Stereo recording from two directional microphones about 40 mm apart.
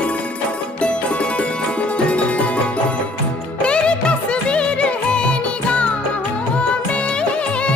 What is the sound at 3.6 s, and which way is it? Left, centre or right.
Music, left.